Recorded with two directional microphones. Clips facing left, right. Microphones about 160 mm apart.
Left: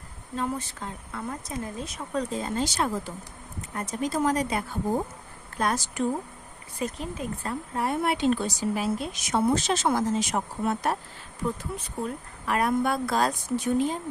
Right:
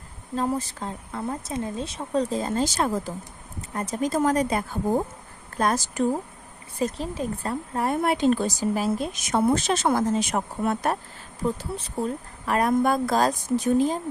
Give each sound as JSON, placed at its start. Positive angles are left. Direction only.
{"t": 0.3, "sound": "speech", "side_deg": -35}
{"t": 11.4, "sound": "speech", "side_deg": -35}